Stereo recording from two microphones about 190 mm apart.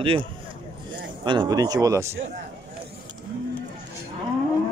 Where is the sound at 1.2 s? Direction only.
20° right (ahead or behind).